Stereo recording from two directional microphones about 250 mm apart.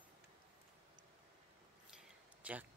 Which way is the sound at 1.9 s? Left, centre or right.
Centre.